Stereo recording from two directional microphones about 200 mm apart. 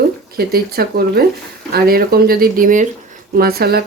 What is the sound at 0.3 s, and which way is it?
Speech, 50° right (ahead or behind).